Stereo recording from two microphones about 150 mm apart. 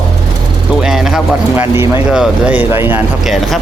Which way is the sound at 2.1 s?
5° right (ahead or behind).